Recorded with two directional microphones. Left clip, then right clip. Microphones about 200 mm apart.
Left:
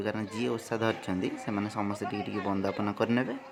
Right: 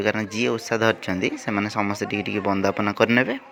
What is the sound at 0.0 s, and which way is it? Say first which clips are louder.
Speech: right 10 dB; 10° right (ahead or behind).